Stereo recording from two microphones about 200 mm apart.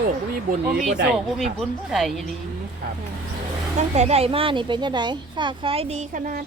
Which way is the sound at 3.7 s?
35° right (ahead or behind).